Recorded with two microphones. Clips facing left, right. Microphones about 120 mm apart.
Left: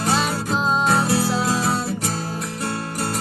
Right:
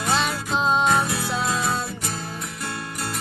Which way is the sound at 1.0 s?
35° left (ahead or behind).